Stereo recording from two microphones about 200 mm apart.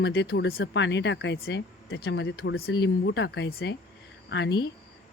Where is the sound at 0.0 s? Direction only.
60° left (ahead or behind).